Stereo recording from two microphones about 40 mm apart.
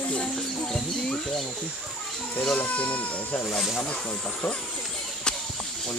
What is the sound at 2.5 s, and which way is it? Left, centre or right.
Speech, left.